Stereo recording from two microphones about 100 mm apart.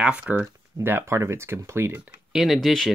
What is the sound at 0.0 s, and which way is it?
Speech, 10° right (ahead or behind).